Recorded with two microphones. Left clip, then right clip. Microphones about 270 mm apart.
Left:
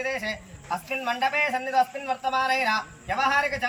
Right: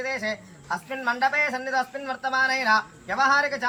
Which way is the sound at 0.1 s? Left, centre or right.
Centre.